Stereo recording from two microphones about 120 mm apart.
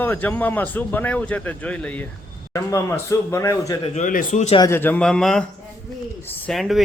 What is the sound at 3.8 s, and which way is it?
Speech, 70° left (ahead or behind).